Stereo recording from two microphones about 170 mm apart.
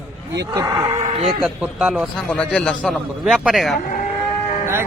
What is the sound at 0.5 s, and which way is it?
Speech, 20° right (ahead or behind).